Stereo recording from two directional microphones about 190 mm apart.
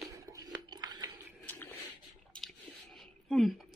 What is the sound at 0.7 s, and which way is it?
Biting, 20° right (ahead or behind).